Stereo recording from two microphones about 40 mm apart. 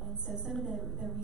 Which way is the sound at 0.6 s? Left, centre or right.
Centre.